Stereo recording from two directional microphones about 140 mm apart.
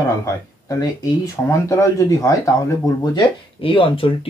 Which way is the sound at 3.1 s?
40° left (ahead or behind).